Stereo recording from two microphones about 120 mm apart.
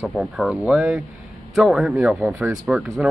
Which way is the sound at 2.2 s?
20° right (ahead or behind).